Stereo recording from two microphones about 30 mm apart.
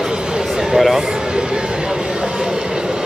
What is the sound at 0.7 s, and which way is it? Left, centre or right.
Speech, centre.